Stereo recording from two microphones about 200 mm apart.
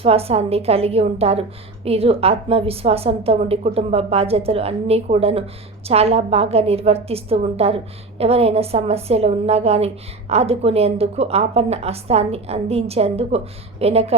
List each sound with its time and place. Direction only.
0.0 s a woman's voice: 30° right (ahead or behind)